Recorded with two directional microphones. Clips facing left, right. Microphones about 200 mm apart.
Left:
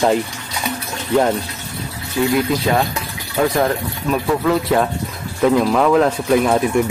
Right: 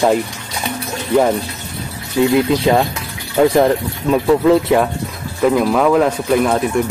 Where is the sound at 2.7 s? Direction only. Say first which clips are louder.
Right 4 dB; 20° right (ahead or behind).